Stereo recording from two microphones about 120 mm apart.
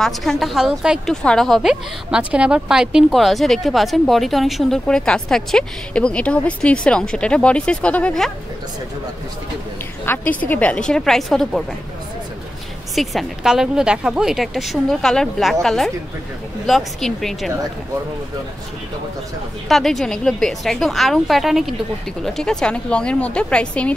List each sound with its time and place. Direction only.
0.0 s speech: centre (ahead or behind)
1.1 s speech: 5° left (ahead or behind)
10.0 s a woman's voice: 15° left (ahead or behind)
12.9 s speech: centre (ahead or behind)
19.7 s a woman's voice: centre (ahead or behind)